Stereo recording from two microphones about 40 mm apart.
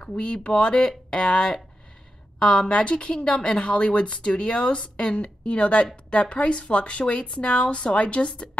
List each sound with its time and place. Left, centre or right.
0.2 s a woman's voice: left